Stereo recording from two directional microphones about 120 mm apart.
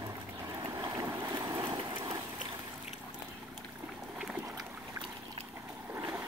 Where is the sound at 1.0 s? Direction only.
15° right (ahead or behind).